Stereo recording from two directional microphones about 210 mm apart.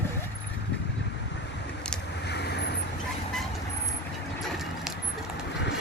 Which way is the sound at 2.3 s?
50° left (ahead or behind).